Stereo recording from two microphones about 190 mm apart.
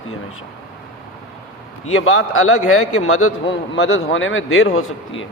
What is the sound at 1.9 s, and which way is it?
Speech, 90° left.